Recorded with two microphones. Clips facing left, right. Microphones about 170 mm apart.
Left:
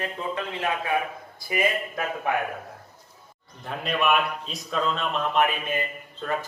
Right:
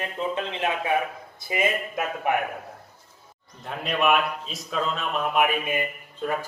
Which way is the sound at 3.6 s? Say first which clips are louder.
Right 1 dB; centre (ahead or behind).